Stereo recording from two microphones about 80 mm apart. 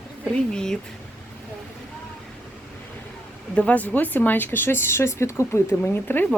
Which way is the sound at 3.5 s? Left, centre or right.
Centre.